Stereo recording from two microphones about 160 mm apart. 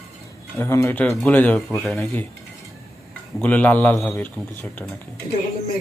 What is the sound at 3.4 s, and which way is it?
Speech, 10° left (ahead or behind).